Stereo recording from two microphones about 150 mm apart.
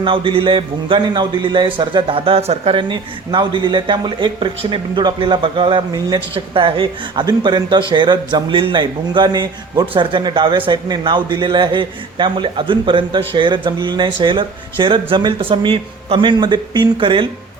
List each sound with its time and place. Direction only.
0.0 s a man's voice: 35° right (ahead or behind)